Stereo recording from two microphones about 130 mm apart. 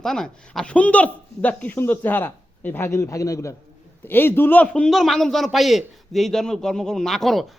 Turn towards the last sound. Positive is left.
turn(degrees=0)  # may be behind; listen again after turning